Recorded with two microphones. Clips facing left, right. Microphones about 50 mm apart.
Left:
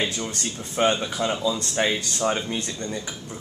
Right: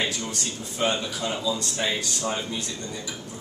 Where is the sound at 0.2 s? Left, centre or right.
Left.